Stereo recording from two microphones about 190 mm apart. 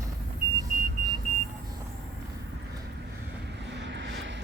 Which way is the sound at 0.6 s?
20° right (ahead or behind).